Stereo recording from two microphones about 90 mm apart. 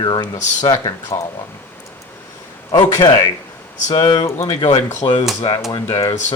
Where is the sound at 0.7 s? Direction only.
35° left (ahead or behind).